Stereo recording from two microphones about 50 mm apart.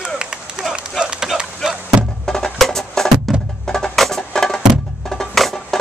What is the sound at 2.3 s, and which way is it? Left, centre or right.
Music, centre.